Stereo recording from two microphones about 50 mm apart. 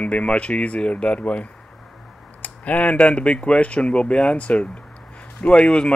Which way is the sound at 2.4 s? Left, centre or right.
Left.